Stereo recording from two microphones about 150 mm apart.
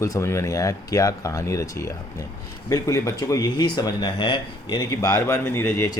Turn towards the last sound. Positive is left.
turn(degrees=20)  # may be behind; listen again after turning